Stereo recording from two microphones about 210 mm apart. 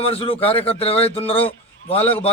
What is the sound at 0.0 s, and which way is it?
A man's voice, 30° left (ahead or behind).